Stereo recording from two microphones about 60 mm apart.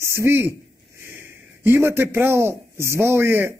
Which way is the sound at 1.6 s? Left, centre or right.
Right.